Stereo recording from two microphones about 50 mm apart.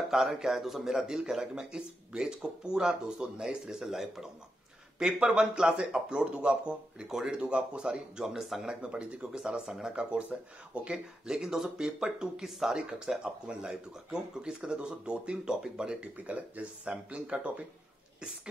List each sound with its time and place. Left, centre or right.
0.1 s a man's voice: centre
4.9 s a man's voice: centre
8.8 s a man's voice: right
10.3 s speech: right
11.2 s a man's voice: centre
13.2 s a man's voice: centre
16.0 s speech: right